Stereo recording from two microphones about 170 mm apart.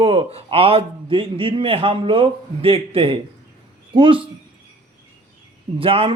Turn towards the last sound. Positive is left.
turn(degrees=-30)  # may be behind; listen again after turning